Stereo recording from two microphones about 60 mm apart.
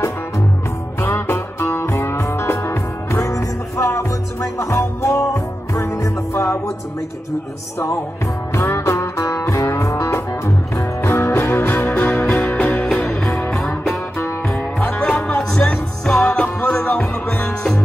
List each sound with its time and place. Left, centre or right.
1.0 s music: left
8.5 s music: left
12.8 s music: centre
14.5 s music: centre